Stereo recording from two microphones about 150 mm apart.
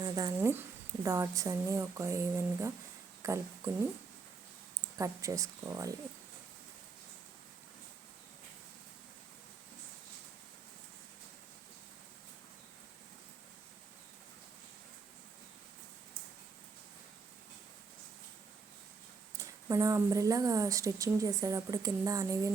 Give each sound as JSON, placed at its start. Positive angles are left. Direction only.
{"t": 0.0, "sound": "a sound", "side_deg": -25}
{"t": 0.3, "sound": "speech", "side_deg": -15}
{"t": 4.9, "sound": "speech", "side_deg": -20}
{"t": 19.4, "sound": "speech", "side_deg": -20}